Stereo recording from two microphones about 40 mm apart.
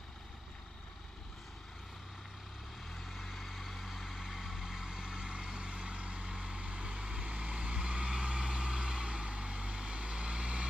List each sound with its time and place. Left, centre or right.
2.9 s vehicle: centre; by 10.7 s right